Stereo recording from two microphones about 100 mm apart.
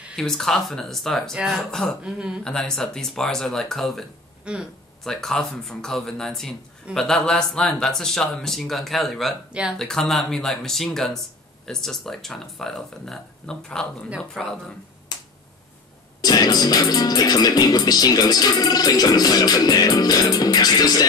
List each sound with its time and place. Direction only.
0.1 s speech: 5° left (ahead or behind)
2.0 s speech: 10° right (ahead or behind)
2.4 s speech: 5° left (ahead or behind)
4.5 s speech: 10° right (ahead or behind)
5.0 s speech: 5° left (ahead or behind)
9.5 s speech: 10° right (ahead or behind)
9.8 s speech: 5° left (ahead or behind)
15.1 s finger snapping: 45° left (ahead or behind)
16.2 s speech: 40° left (ahead or behind)